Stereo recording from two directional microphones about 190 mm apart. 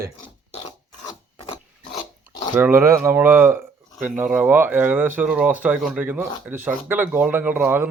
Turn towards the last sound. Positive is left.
turn(degrees=-10)  # may be behind; listen again after turning